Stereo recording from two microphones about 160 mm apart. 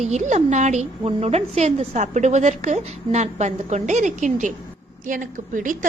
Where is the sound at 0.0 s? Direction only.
45° right (ahead or behind).